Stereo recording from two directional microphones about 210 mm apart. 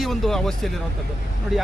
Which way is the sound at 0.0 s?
Centre (ahead or behind).